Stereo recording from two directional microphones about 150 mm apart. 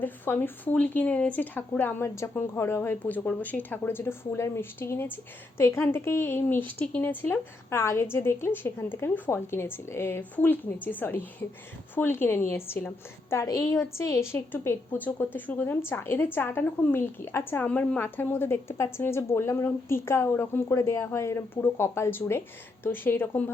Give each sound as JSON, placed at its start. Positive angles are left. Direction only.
{"t": 0.0, "sound": "speech", "side_deg": 15}